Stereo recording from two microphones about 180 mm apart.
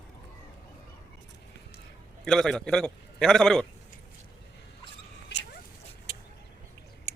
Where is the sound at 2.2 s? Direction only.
Centre (ahead or behind).